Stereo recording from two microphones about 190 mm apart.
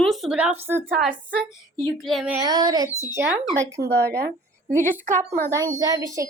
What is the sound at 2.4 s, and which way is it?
Speech, 20° right (ahead or behind).